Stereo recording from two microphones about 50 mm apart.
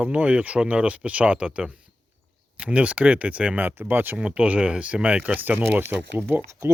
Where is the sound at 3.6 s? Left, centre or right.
Right.